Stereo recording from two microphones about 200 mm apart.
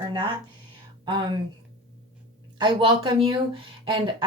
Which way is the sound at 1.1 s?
25° right (ahead or behind).